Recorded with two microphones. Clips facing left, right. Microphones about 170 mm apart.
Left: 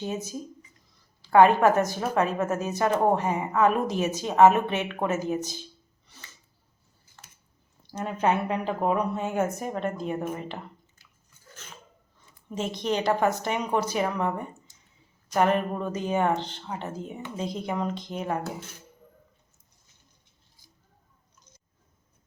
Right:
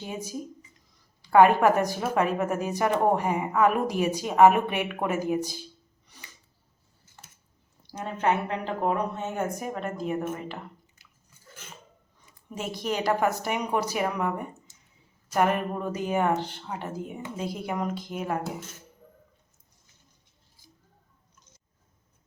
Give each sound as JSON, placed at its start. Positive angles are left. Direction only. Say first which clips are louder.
{"t": 0.0, "sound": "speech", "louder": "left 2 dB", "side_deg": -10}
{"t": 6.1, "sound": "music", "louder": "even", "side_deg": -15}
{"t": 7.9, "sound": "speech", "louder": "left 3 dB", "side_deg": -40}
{"t": 8.2, "sound": "speech", "louder": "left 1 dB", "side_deg": 15}
{"t": 9.6, "sound": "a woman's voice", "louder": "left 2 dB", "side_deg": -5}
{"t": 12.5, "sound": "speech", "louder": "left 2 dB", "side_deg": -5}
{"t": 15.3, "sound": "speech", "louder": "left 1 dB", "side_deg": -10}